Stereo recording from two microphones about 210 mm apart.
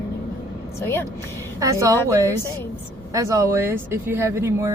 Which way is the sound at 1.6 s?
15° right (ahead or behind).